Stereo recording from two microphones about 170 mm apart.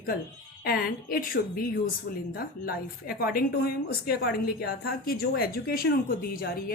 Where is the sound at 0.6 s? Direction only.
65° left (ahead or behind).